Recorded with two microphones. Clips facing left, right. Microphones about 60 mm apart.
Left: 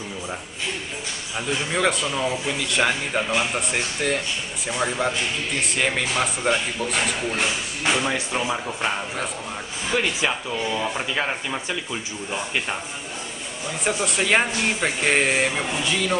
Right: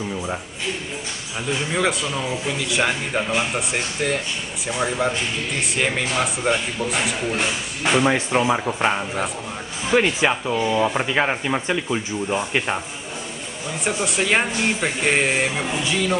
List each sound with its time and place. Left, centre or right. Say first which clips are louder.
1.5 s a man's voice: right 1 dB; centre
8.5 s speech: right 5 dB; centre
11.0 s speech: right 5 dB; right
13.8 s a man's voice: right 1 dB; centre